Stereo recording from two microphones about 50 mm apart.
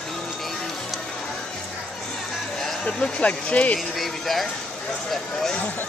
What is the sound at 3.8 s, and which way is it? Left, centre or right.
A man's voice, centre.